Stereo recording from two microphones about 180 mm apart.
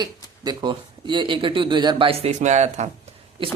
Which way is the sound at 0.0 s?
25° right (ahead or behind).